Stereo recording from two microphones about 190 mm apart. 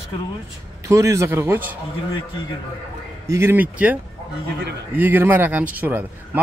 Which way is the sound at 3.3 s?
15° right (ahead or behind).